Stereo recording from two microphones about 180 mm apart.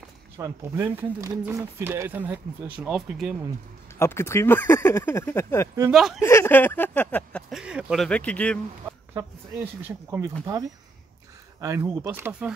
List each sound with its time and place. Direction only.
0.4 s speech: 20° right (ahead or behind)
4.0 s speech: 15° left (ahead or behind)
5.9 s speech: 5° right (ahead or behind)
6.2 s speech: 15° left (ahead or behind)
9.8 s speech: 10° right (ahead or behind)
11.6 s speech: 15° right (ahead or behind)